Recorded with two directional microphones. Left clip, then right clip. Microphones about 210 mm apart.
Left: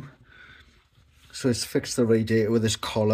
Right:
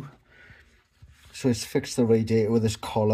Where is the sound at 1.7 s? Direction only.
10° left (ahead or behind).